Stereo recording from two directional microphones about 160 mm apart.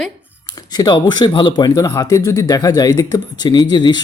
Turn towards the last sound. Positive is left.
turn(degrees=25)  # may be behind; listen again after turning